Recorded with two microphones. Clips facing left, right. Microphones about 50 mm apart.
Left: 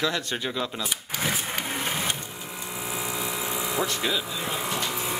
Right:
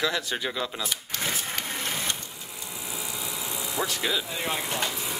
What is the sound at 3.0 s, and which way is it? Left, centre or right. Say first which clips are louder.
Vehicle: left 5 dB; left.